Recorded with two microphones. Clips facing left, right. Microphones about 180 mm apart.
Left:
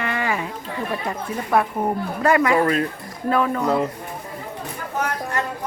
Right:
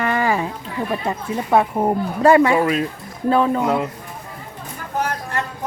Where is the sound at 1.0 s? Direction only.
25° right (ahead or behind).